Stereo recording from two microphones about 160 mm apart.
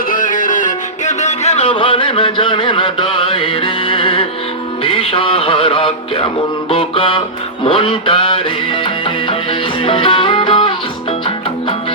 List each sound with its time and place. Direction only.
0.1 s music: 55° left (ahead or behind); by 6.2 s 35° left (ahead or behind)
6.7 s a sound: 35° left (ahead or behind)
8.8 s music: 30° left (ahead or behind)